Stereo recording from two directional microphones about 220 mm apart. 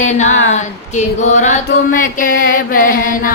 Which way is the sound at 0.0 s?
30° left (ahead or behind).